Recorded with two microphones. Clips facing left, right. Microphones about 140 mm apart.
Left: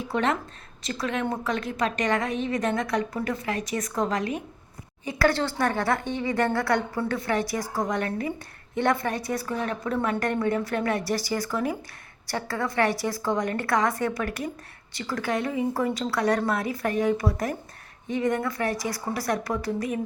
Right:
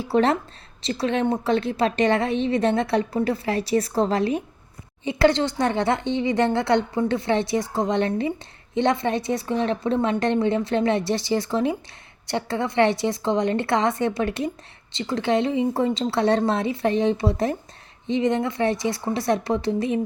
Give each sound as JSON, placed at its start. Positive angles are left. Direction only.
{"t": 0.0, "sound": "a woman's voice", "side_deg": -30}